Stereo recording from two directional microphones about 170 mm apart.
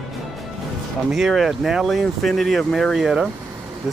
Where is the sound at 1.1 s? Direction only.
Centre (ahead or behind).